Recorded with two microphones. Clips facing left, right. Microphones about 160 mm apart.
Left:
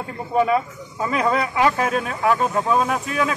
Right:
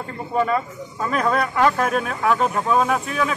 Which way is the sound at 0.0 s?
10° left (ahead or behind).